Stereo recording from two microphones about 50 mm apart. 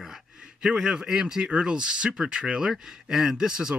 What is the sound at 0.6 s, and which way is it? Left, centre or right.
A man's voice, centre.